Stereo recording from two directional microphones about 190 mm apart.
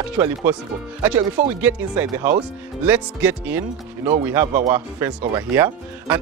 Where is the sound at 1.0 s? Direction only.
10° right (ahead or behind).